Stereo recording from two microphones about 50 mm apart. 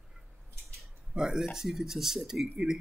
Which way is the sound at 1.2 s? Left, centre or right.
Centre.